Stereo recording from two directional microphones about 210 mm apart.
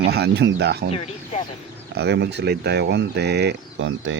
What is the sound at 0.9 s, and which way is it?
Speech, 30° left (ahead or behind).